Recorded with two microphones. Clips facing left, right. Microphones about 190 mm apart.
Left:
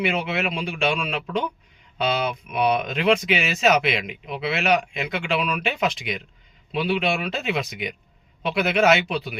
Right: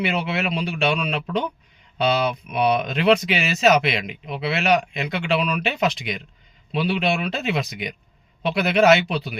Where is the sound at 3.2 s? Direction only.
Centre (ahead or behind).